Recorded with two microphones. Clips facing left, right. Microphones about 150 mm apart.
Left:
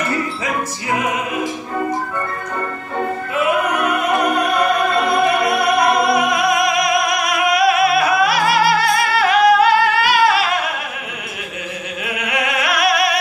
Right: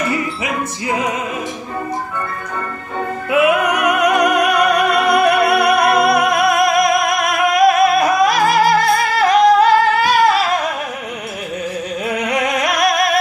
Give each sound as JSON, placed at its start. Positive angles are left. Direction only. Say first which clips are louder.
{"t": 4.4, "sound": "music", "louder": "right 2 dB", "side_deg": -80}
{"t": 12.2, "sound": "music", "louder": "right 2 dB", "side_deg": -40}